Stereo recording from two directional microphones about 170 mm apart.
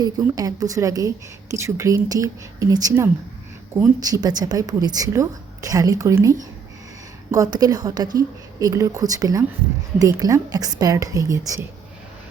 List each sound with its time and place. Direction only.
0.0 s a woman's voice: 20° right (ahead or behind)